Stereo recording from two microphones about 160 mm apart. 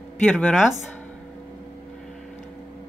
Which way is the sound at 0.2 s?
5° left (ahead or behind).